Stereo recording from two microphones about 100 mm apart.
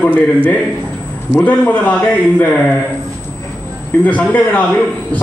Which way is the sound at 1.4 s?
10° left (ahead or behind).